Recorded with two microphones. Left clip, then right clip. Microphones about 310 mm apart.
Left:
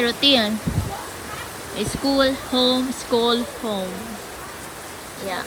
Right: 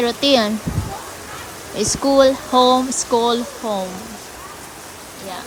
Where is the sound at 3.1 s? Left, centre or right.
Centre.